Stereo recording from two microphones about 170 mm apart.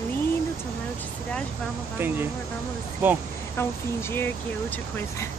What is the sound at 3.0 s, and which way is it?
Speech, 10° right (ahead or behind).